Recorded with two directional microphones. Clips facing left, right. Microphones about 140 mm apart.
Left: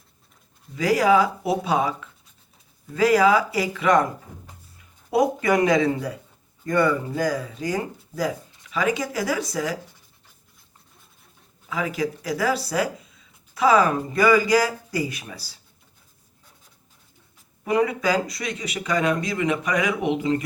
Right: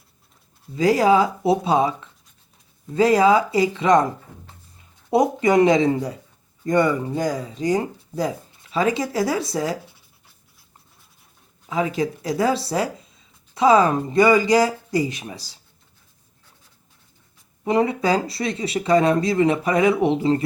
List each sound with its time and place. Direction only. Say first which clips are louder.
0.8 s speech: right 2 dB; 25° right (ahead or behind)
11.7 s speech: right 3 dB; 25° right (ahead or behind)
17.7 s speech: right 2 dB; 25° right (ahead or behind)